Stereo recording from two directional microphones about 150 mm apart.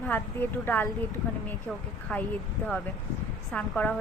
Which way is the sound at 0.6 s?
15° left (ahead or behind).